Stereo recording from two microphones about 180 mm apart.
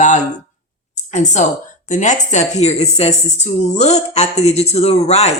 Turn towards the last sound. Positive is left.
turn(degrees=35)  # may be behind; listen again after turning